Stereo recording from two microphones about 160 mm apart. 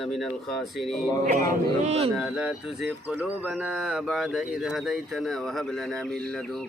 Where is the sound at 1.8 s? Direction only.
40° right (ahead or behind).